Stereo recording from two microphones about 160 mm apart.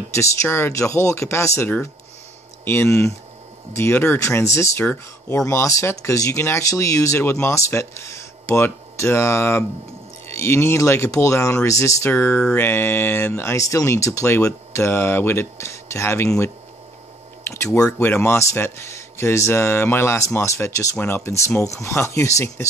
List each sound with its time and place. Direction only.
0.1 s speech: 15° left (ahead or behind)
17.5 s speech: 20° left (ahead or behind)